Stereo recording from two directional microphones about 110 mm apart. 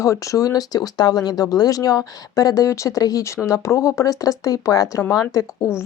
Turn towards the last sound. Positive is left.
turn(degrees=30)  # may be behind; listen again after turning